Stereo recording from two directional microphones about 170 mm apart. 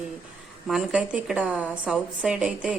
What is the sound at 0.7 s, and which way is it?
A woman's voice, 5° right (ahead or behind).